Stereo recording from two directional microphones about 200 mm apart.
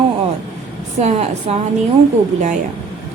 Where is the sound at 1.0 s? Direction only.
30° right (ahead or behind).